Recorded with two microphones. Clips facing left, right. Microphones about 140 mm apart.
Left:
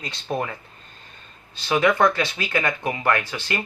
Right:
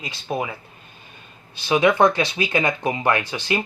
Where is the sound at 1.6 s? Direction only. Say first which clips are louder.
Right 2 dB; 15° right (ahead or behind).